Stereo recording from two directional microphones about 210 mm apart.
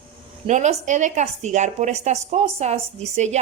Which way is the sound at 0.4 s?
35° right (ahead or behind).